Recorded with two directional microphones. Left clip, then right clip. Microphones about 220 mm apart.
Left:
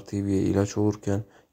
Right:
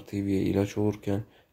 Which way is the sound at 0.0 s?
20° left (ahead or behind).